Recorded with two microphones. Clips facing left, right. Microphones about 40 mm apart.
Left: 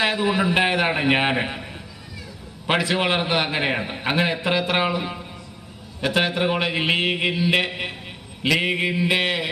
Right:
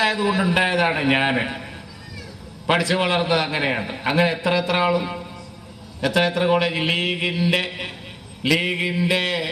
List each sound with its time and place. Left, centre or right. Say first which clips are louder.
0.0 s a man's voice: right 1 dB; left
2.7 s a man's voice: right 1 dB; left